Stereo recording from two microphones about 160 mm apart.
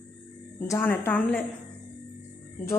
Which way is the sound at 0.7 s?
15° left (ahead or behind).